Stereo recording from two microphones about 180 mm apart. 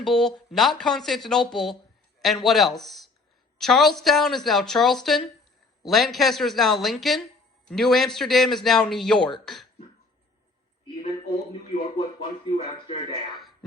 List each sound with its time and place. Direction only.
0.0 s a man's voice: centre (ahead or behind)
12.2 s speech: 35° left (ahead or behind)
13.3 s a sound: centre (ahead or behind)